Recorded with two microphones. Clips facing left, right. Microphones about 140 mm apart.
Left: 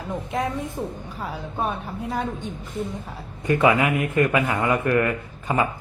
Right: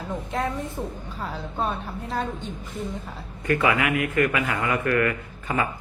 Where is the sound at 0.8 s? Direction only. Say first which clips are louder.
Left 2 dB; 10° left (ahead or behind).